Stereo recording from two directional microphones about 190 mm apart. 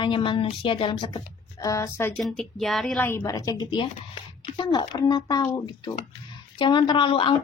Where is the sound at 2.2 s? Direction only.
Centre (ahead or behind).